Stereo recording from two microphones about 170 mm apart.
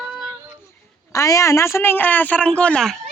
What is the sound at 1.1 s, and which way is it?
Speech, 20° left (ahead or behind).